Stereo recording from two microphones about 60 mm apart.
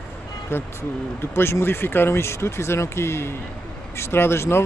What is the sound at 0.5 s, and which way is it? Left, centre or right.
Speech, left.